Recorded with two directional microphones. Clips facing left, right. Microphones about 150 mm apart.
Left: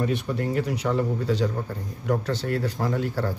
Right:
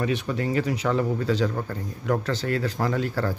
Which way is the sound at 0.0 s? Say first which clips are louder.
Even; 90° right.